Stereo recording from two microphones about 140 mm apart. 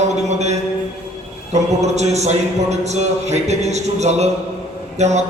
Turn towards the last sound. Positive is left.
turn(degrees=-55)  # may be behind; listen again after turning